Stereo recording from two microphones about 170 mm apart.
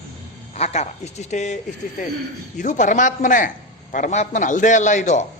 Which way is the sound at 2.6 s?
45° left (ahead or behind).